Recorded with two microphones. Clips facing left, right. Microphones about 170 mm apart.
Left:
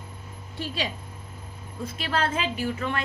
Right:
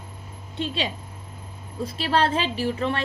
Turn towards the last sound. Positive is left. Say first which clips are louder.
# right 3 dB
turn(degrees=-30)  # may be behind; listen again after turning